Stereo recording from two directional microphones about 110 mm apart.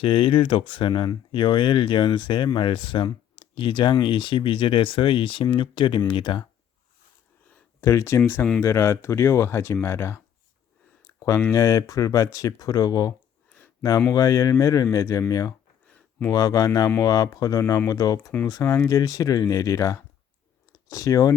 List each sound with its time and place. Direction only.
0.0 s speech: 55° left (ahead or behind)
7.8 s speech: 25° left (ahead or behind)
11.0 s a sound: 30° left (ahead or behind)
11.5 s speech: 30° left (ahead or behind)